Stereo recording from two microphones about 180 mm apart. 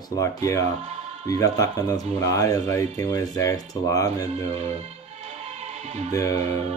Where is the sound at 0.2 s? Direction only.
15° left (ahead or behind).